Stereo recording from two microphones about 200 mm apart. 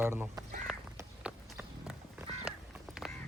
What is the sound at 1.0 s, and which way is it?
Run, 5° right (ahead or behind).